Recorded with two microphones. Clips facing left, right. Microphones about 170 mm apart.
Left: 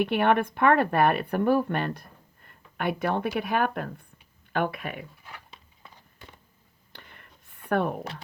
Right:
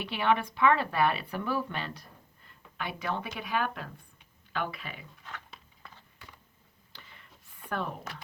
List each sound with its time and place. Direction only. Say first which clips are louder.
0.0 s speech: left 6 dB; 55° left (ahead or behind)
5.9 s a sound: left 3 dB; 20° left (ahead or behind)
6.9 s whispering: left 4 dB; 60° left (ahead or behind)
7.7 s speech: left 9 dB; 55° left (ahead or behind)